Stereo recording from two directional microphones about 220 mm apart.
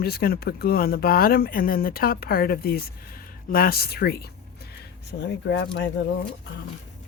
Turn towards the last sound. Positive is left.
turn(degrees=55)  # may be behind; listen again after turning